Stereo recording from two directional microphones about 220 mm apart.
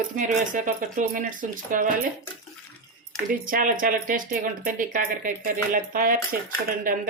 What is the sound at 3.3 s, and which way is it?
Speech, 40° right (ahead or behind).